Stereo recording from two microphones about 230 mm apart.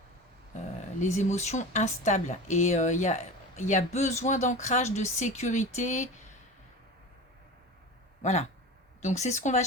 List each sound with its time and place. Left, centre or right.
0.9 s speech: left
8.2 s speech: left